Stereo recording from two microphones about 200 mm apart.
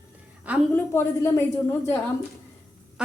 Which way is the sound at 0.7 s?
15° left (ahead or behind).